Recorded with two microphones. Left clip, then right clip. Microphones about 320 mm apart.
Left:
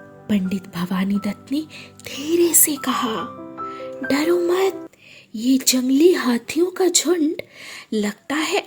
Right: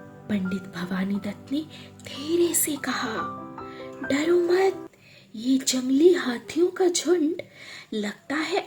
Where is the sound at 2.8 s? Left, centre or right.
Left.